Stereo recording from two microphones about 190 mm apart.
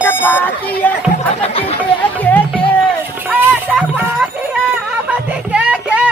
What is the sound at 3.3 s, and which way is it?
Speech, 5° right (ahead or behind).